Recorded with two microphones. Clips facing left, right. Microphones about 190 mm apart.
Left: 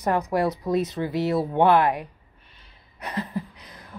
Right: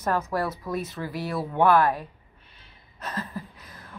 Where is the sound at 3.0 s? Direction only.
15° left (ahead or behind).